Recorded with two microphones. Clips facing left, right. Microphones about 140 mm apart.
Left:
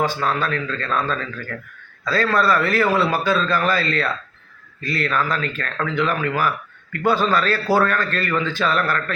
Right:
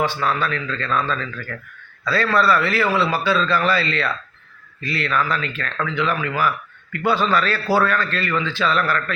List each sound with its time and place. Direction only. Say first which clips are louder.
0.0 s a man's voice: even; 40° left (ahead or behind)